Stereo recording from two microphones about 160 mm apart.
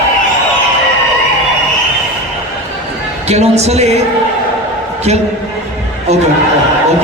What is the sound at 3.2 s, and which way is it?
Speech, 45° right (ahead or behind).